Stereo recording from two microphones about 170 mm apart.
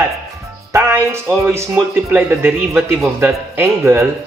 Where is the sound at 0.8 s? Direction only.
15° right (ahead or behind).